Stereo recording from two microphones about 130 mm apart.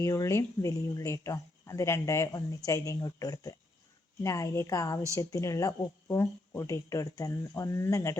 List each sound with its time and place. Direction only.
0.0 s speech: 25° left (ahead or behind)